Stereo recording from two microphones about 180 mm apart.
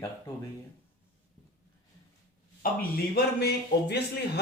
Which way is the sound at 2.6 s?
55° left (ahead or behind).